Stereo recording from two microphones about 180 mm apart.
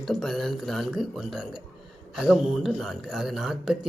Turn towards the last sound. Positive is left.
turn(degrees=0)  # may be behind; listen again after turning